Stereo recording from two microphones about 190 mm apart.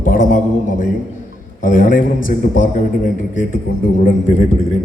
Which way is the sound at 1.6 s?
45° left (ahead or behind).